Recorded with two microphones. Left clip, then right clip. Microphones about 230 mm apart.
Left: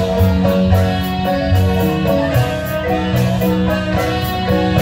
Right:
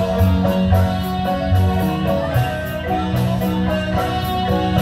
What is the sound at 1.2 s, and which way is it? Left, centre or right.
Music, left.